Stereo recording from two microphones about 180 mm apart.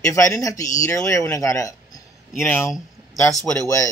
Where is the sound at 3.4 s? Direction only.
20° left (ahead or behind).